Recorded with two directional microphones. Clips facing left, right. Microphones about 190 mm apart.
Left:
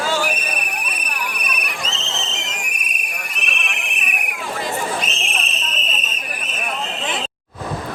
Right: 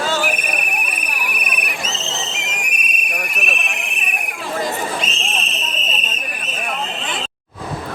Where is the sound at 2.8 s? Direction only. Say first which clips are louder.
Right 4 dB; 20° right (ahead or behind).